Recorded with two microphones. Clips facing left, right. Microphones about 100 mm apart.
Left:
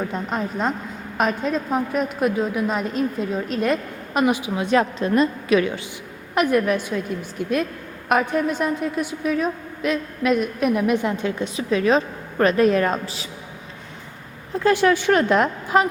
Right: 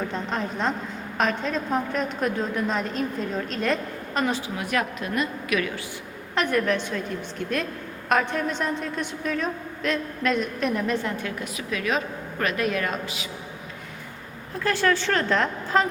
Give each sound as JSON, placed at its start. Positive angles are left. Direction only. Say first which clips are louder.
{"t": 0.1, "sound": "a woman's voice", "louder": "left 3 dB", "side_deg": 5}
{"t": 6.3, "sound": "a woman's voice", "louder": "left 4 dB", "side_deg": 10}
{"t": 14.6, "sound": "a woman's voice", "louder": "left 5 dB", "side_deg": 15}